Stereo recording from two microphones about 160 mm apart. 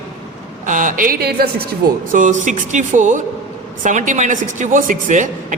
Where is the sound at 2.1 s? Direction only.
50° right (ahead or behind).